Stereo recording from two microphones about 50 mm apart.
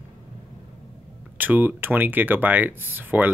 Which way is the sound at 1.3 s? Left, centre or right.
Right.